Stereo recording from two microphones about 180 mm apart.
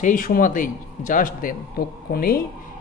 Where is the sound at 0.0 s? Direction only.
50° left (ahead or behind).